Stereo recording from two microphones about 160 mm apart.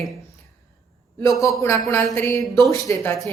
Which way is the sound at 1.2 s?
20° left (ahead or behind).